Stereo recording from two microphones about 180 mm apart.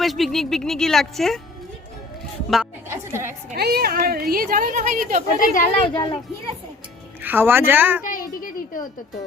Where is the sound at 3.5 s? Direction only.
60° right (ahead or behind).